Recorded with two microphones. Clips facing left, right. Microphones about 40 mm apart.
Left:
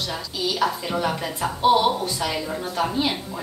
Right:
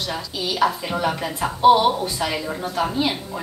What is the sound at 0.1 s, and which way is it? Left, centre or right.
A woman's voice, centre.